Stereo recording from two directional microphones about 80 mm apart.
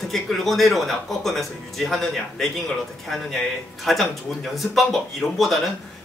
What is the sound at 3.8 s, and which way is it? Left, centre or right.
Speech, centre.